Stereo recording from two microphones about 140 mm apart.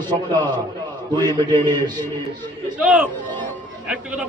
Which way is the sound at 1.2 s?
30° right (ahead or behind).